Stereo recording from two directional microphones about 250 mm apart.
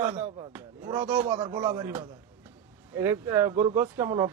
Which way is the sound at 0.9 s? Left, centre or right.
Centre.